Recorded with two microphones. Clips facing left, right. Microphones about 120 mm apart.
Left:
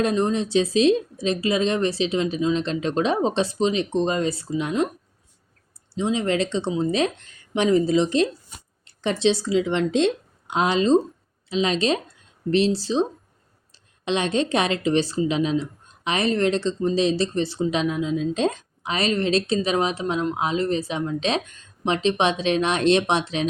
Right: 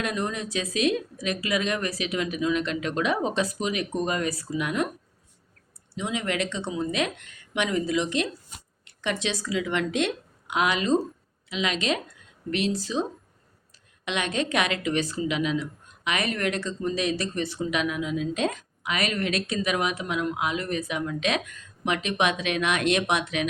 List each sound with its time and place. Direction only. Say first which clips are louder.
0.0 s speech: left 8 dB; 30° left (ahead or behind)
5.9 s a woman's voice: left 6 dB; 30° left (ahead or behind)